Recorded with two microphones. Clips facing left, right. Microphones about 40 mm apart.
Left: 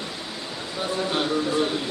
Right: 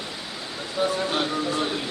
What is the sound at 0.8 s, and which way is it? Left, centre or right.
Music, centre.